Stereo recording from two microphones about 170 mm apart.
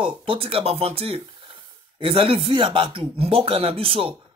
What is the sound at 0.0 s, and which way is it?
Speech, 30° right (ahead or behind).